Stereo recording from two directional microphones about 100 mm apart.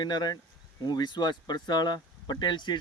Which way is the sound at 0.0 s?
45° left (ahead or behind).